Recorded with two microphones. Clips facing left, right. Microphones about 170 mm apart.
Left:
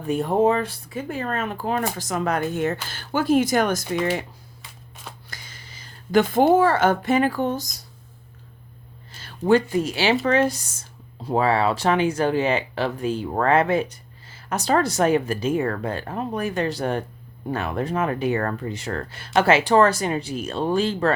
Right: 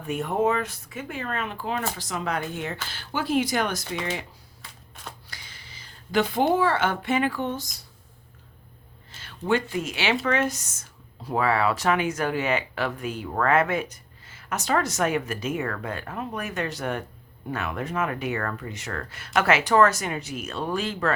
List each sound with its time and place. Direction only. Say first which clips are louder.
0.1 s speech: left 5 dB; 35° left (ahead or behind)
5.3 s a sound: left 3 dB; 45° left (ahead or behind)
6.5 s speech: left 5 dB; 45° left (ahead or behind)
9.2 s speech: left 6 dB; 35° left (ahead or behind)